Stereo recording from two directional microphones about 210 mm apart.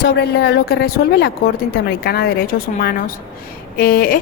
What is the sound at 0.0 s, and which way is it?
A woman's voice, 50° left (ahead or behind).